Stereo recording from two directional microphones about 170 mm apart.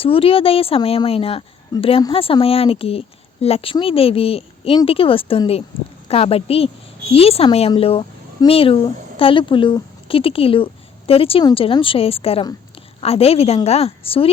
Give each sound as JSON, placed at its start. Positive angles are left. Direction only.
{"t": 0.0, "sound": "speech", "side_deg": 35}